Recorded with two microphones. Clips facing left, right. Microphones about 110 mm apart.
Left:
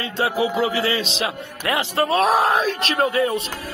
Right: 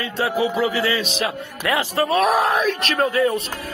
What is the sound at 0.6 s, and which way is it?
A man's voice, 30° left (ahead or behind).